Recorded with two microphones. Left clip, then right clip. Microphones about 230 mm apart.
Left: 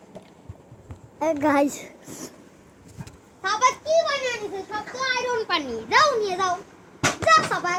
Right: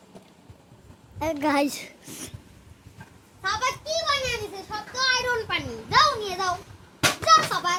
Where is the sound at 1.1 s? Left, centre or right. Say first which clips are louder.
Left 3 dB; right.